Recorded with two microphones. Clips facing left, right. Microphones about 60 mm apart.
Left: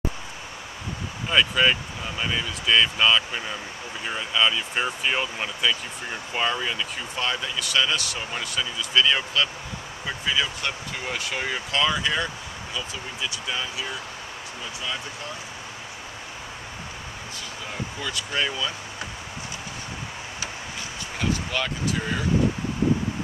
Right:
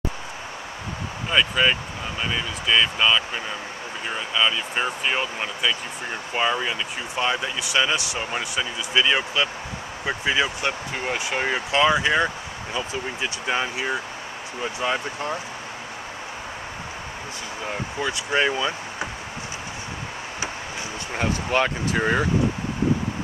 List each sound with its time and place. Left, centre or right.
1.3 s speech: centre; by 15.3 s right
17.6 s speech: right
21.2 s speech: right